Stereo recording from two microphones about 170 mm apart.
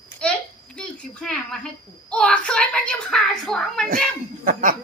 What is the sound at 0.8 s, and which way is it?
A child's voice, 5° left (ahead or behind).